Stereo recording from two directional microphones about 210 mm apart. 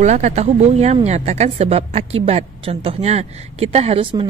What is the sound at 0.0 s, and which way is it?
A woman's voice, 35° right (ahead or behind).